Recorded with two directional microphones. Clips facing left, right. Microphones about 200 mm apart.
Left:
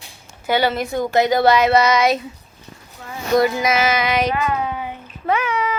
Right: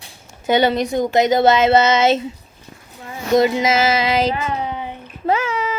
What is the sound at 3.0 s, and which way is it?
Child singing, 20° right (ahead or behind).